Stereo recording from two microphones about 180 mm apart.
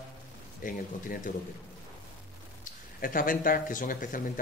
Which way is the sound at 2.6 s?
50° left (ahead or behind).